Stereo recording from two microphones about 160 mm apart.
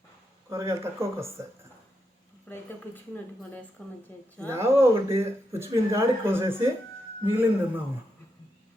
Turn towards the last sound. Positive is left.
turn(degrees=-15)  # may be behind; listen again after turning